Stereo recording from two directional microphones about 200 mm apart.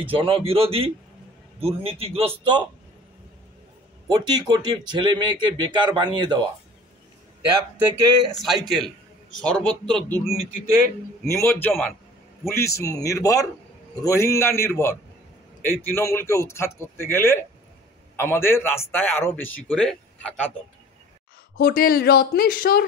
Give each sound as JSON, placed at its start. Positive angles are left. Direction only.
{"t": 0.0, "sound": "speech", "side_deg": -25}
{"t": 4.1, "sound": "speech", "side_deg": -20}
{"t": 8.4, "sound": "a man's voice", "side_deg": 0}
{"t": 11.2, "sound": "a man's voice", "side_deg": 10}
{"t": 21.5, "sound": "speech", "side_deg": 45}